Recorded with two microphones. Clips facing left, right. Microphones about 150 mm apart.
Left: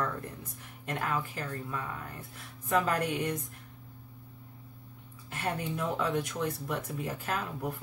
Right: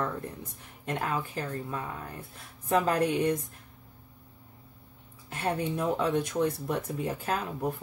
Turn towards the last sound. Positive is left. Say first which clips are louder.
# right 3 dB
turn(degrees=-30)  # may be behind; listen again after turning